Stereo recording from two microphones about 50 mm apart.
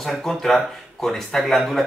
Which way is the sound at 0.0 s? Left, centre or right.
Centre.